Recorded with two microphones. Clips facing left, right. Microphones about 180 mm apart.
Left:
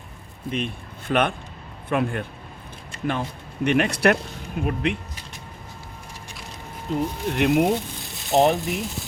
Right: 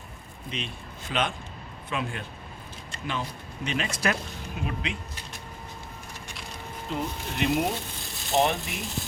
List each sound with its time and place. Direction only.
0.5 s speech: 55° left (ahead or behind)
6.9 s speech: 40° left (ahead or behind)
7.3 s speech: 60° left (ahead or behind)
8.0 s speech: centre (ahead or behind)